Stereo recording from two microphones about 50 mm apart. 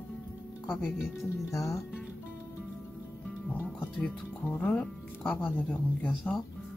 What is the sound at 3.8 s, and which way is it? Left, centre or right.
Speech, left.